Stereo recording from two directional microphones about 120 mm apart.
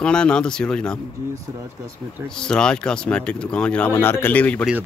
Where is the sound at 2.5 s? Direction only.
5° left (ahead or behind).